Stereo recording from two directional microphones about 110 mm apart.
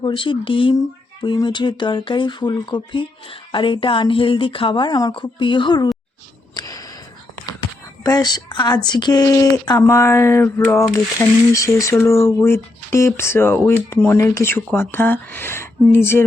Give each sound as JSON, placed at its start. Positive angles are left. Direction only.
{"t": 0.0, "sound": "speech", "side_deg": 50}
{"t": 6.5, "sound": "a sound", "side_deg": 35}
{"t": 8.0, "sound": "a woman's voice", "side_deg": 35}